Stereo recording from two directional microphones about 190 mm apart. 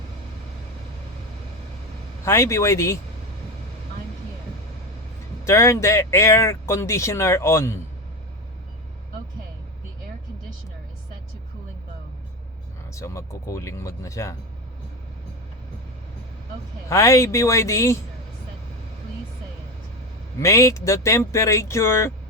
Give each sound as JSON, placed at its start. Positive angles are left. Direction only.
{"t": 2.2, "sound": "speech", "side_deg": 15}
{"t": 5.5, "sound": "speech", "side_deg": 15}
{"t": 12.9, "sound": "speech", "side_deg": 15}
{"t": 16.9, "sound": "speech", "side_deg": 15}
{"t": 20.4, "sound": "speech", "side_deg": 15}